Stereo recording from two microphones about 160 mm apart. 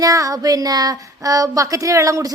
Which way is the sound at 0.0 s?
20° right (ahead or behind).